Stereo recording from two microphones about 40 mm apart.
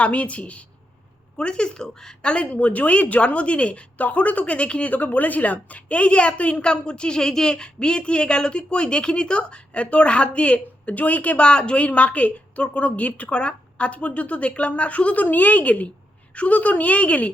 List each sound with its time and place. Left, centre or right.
0.0 s a woman's voice: left; by 2.1 s centre
2.2 s a woman's voice: left
11.4 s a woman's voice: left